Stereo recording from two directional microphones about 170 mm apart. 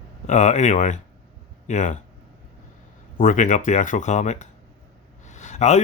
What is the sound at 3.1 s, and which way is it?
Speech, 50° left (ahead or behind).